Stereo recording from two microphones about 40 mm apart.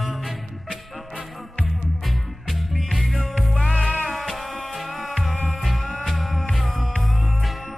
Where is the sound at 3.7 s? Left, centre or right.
Left.